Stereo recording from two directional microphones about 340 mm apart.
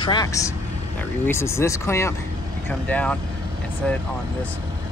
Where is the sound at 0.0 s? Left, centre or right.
Centre.